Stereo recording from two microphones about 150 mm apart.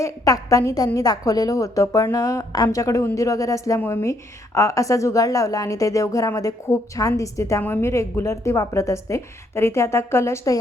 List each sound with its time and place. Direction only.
0.0 s a woman's voice: 25° left (ahead or behind)